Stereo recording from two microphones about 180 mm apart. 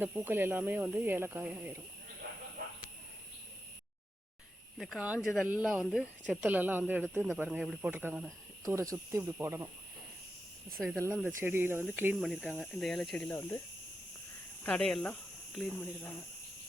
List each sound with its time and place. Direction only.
0.0 s speech: 10° right (ahead or behind)
4.8 s speech: 5° right (ahead or behind)
8.6 s speech: 20° right (ahead or behind)
10.9 s speech: 10° right (ahead or behind); by 13.6 s 10° left (ahead or behind)
14.6 s speech: 5° left (ahead or behind)